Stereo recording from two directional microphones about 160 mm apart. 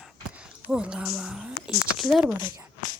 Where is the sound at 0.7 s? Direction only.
5° right (ahead or behind).